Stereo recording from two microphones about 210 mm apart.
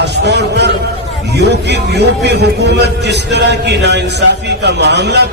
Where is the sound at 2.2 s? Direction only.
55° right (ahead or behind).